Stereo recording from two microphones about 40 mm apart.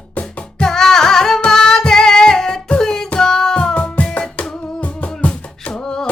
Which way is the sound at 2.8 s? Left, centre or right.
Centre.